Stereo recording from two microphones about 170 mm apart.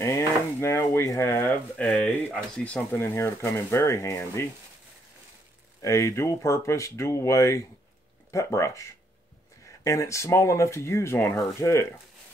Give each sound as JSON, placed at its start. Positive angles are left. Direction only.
{"t": 0.0, "sound": "speech", "side_deg": 15}
{"t": 5.8, "sound": "speech", "side_deg": 20}
{"t": 9.8, "sound": "speech", "side_deg": 15}